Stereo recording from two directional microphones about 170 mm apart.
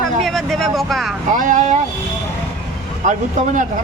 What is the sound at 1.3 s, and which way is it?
Speech, 50° right (ahead or behind).